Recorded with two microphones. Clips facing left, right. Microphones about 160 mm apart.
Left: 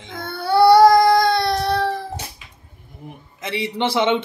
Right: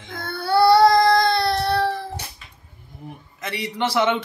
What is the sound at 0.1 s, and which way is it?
Child singing, 25° left (ahead or behind).